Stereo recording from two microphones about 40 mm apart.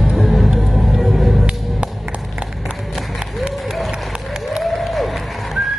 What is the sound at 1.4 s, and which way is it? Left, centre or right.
Music, right.